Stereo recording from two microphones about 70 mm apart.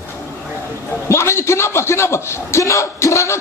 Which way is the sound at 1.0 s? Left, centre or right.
Left.